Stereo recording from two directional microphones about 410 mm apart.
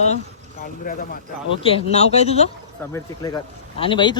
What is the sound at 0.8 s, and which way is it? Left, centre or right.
Speech, centre.